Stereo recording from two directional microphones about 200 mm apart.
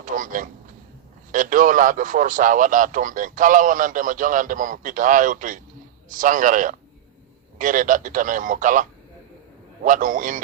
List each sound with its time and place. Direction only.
0.0 s a man's voice: 40° right (ahead or behind)